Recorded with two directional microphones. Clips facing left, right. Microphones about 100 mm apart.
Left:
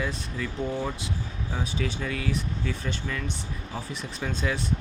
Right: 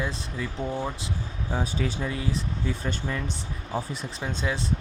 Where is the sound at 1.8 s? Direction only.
25° right (ahead or behind).